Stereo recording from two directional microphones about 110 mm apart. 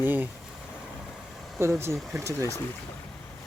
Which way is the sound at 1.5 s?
25° right (ahead or behind).